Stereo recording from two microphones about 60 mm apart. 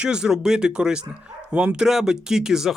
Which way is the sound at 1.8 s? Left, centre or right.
Centre.